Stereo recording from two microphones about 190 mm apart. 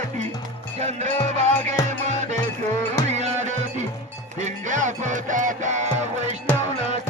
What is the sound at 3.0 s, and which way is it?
Music, 35° right (ahead or behind).